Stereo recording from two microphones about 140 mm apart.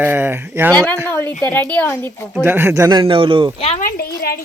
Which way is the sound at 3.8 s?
90° left.